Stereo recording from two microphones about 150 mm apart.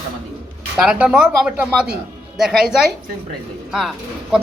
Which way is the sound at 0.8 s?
5° right (ahead or behind).